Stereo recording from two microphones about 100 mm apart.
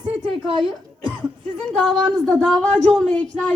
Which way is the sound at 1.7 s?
Centre (ahead or behind).